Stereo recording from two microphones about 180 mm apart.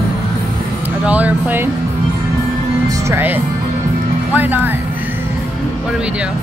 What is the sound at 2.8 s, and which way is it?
Speech, 15° right (ahead or behind).